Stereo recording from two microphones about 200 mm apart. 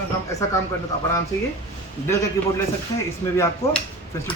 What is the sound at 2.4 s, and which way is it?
Speech, 15° left (ahead or behind).